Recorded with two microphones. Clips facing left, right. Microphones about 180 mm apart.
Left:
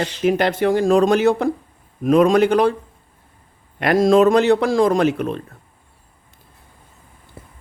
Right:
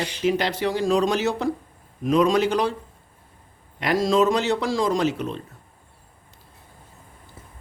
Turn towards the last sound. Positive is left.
turn(degrees=55)  # may be behind; listen again after turning